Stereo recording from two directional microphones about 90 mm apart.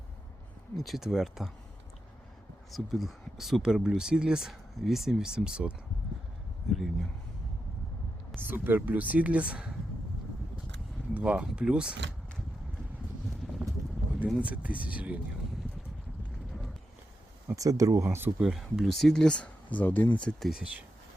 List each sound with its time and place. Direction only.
0.8 s speech: centre (ahead or behind)
2.7 s speech: centre (ahead or behind)
8.4 s speech: 20° right (ahead or behind)
11.1 s speech: 15° right (ahead or behind)
13.5 s clip-clop: centre (ahead or behind)
14.3 s speech: 15° right (ahead or behind)
17.5 s speech: 40° right (ahead or behind)
18.3 s speech: 5° right (ahead or behind); by 20.1 s 20° left (ahead or behind)
20.4 s speech: 5° right (ahead or behind)